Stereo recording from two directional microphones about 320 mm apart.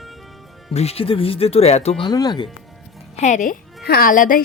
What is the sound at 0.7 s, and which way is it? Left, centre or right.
Speech, centre.